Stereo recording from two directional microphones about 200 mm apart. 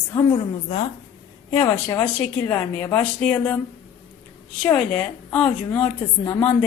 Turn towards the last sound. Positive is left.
turn(degrees=15)  # may be behind; listen again after turning